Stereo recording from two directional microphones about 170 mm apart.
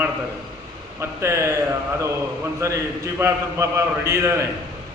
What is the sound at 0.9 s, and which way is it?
Speech, 15° right (ahead or behind).